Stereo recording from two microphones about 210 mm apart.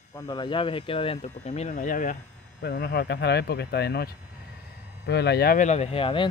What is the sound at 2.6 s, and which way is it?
Speech, 50° left (ahead or behind).